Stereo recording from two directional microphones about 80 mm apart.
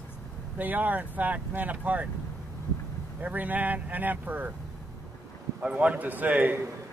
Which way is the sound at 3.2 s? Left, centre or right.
Right.